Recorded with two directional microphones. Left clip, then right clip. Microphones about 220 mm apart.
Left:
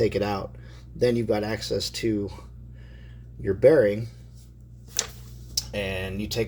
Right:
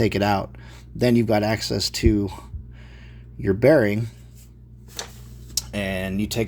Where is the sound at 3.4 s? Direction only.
55° right (ahead or behind).